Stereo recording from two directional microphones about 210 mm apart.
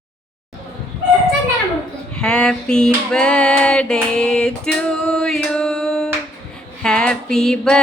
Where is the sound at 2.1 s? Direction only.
5° left (ahead or behind).